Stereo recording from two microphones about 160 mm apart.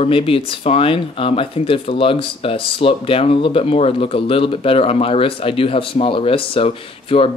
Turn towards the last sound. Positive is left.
turn(degrees=35)  # may be behind; listen again after turning